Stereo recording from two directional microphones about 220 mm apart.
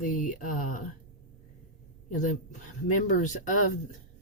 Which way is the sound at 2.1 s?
35° left (ahead or behind).